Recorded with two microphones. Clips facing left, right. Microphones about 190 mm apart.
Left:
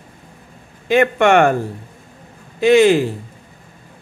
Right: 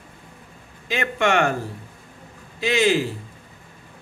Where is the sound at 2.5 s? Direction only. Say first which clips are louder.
Left 9 dB; 55° left (ahead or behind).